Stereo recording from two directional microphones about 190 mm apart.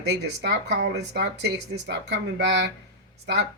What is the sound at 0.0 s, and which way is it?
Speech, 60° right (ahead or behind).